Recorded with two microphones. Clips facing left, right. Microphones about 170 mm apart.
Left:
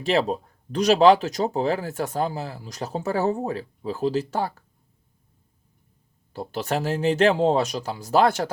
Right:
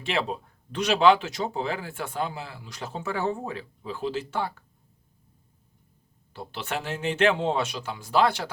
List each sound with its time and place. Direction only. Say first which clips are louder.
0.0 s speech: left 6 dB; 40° left (ahead or behind)
6.3 s speech: left 6 dB; 40° left (ahead or behind)